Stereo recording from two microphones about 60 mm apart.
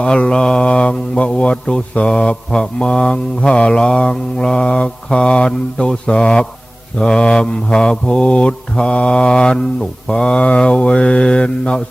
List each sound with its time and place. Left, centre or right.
0.0 s mantra: centre